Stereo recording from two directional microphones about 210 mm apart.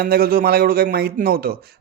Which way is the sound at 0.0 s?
45° right (ahead or behind).